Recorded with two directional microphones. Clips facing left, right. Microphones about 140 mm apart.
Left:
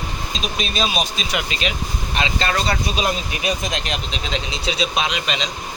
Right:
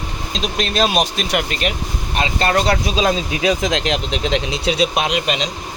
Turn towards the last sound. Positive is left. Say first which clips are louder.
# right 4 dB
turn(degrees=-50)  # may be behind; listen again after turning